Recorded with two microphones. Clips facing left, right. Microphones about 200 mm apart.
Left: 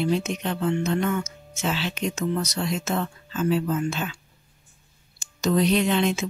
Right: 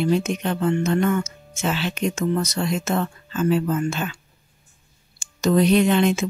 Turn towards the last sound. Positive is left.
turn(degrees=-50)  # may be behind; listen again after turning